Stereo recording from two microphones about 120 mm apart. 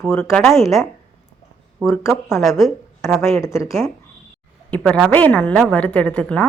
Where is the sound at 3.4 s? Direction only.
25° left (ahead or behind).